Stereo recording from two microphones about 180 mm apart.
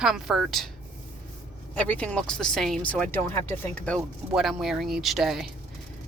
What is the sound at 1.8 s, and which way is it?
Speech, 10° left (ahead or behind).